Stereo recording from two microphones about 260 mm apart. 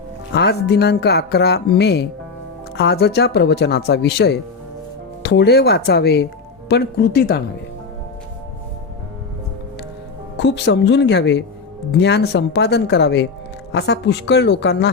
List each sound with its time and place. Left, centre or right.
0.3 s speech: left
10.3 s speech: left